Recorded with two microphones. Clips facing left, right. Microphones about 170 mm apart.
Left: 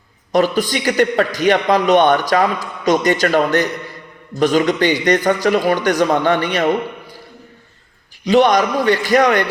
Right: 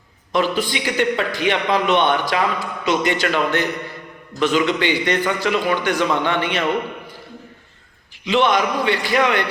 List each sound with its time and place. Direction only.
0.3 s a man's voice: 40° left (ahead or behind)
8.2 s a man's voice: 40° left (ahead or behind)